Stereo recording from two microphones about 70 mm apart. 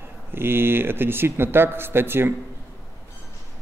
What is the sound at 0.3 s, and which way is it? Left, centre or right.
Speech, right.